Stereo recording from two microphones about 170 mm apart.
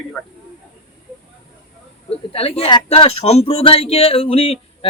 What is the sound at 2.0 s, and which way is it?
Speech, 35° left (ahead or behind).